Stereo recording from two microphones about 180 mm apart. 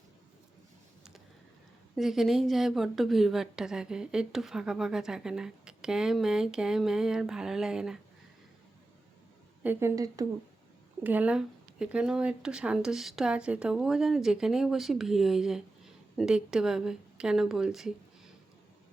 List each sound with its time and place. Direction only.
2.0 s speech: centre (ahead or behind)
9.6 s a woman's voice: 15° right (ahead or behind)
11.0 s speech: 10° right (ahead or behind)